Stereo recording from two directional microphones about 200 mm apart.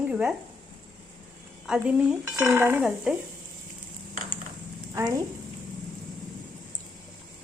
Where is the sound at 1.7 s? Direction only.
5° right (ahead or behind).